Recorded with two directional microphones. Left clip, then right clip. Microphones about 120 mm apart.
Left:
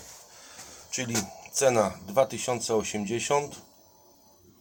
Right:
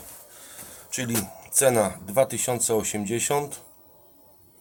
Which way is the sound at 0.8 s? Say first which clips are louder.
Right 2 dB; 20° right (ahead or behind).